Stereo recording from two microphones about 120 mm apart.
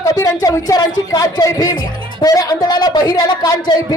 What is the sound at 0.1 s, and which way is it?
A man's voice, 30° left (ahead or behind).